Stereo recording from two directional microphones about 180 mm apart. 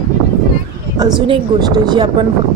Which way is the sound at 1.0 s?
25° right (ahead or behind).